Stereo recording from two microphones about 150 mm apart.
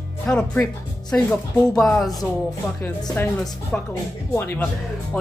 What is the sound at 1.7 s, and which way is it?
Music, centre (ahead or behind).